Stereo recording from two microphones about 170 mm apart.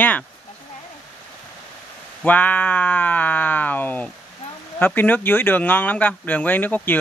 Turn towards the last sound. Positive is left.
turn(degrees=10)  # may be behind; listen again after turning